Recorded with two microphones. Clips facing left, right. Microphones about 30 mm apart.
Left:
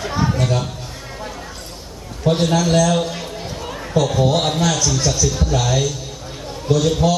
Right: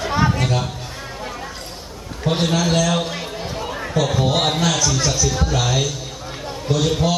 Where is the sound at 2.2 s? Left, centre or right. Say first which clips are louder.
Left 2 dB; centre.